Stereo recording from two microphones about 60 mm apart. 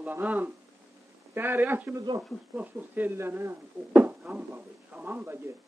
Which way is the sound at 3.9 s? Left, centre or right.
Right.